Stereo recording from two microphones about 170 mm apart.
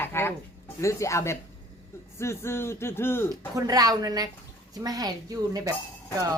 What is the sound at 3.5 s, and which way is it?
Speech, 20° right (ahead or behind).